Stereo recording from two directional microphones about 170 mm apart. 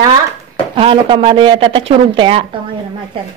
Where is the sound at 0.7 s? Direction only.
30° right (ahead or behind).